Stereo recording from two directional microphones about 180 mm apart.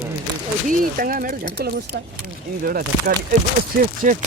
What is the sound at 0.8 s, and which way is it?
Speech, 50° right (ahead or behind).